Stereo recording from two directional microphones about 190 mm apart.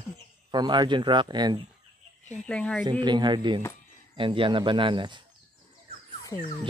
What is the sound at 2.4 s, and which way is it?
Speech, 5° left (ahead or behind).